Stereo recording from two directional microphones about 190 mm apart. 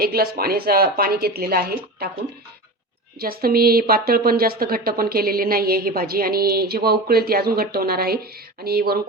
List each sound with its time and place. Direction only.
0.0 s speech: 55° right (ahead or behind)
3.2 s speech: 50° right (ahead or behind)